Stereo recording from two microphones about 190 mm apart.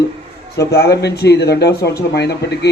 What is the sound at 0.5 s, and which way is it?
Speech, 60° left (ahead or behind).